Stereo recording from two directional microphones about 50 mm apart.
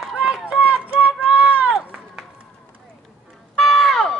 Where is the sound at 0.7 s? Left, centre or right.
Right.